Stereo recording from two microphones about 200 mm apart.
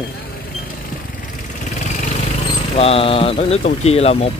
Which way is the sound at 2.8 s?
30° left (ahead or behind).